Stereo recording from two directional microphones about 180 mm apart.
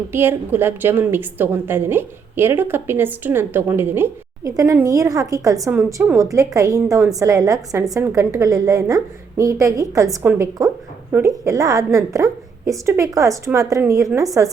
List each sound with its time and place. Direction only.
0.1 s a woman's voice: 10° right (ahead or behind)